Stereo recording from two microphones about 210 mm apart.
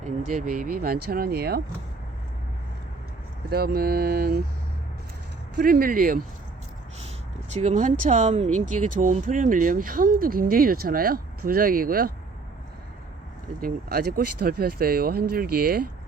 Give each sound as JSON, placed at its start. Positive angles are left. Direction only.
{"t": 0.6, "sound": "speech", "side_deg": -45}
{"t": 3.5, "sound": "speech", "side_deg": -45}
{"t": 5.5, "sound": "speech", "side_deg": -45}
{"t": 7.5, "sound": "speech", "side_deg": -35}
{"t": 13.6, "sound": "speech", "side_deg": -45}